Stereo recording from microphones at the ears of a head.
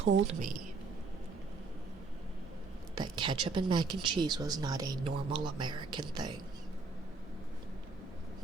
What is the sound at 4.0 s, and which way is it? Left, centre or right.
Speech, right.